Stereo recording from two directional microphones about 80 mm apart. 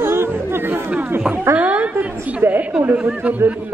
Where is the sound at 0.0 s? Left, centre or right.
Right.